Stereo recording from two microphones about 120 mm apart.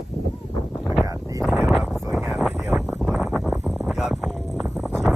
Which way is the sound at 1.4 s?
Centre (ahead or behind).